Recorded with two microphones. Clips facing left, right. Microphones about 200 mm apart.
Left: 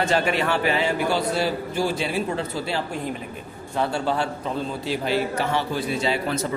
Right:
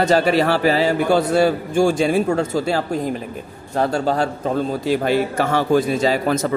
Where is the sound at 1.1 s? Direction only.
50° right (ahead or behind).